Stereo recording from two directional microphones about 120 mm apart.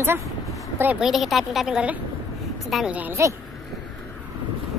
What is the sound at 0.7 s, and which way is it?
Speech, 15° right (ahead or behind).